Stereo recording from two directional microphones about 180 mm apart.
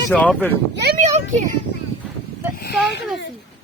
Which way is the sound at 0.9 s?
45° right (ahead or behind).